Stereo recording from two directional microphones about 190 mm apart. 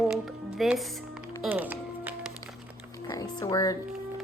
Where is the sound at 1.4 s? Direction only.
10° right (ahead or behind).